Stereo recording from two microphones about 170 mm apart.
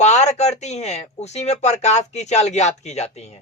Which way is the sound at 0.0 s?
40° left (ahead or behind).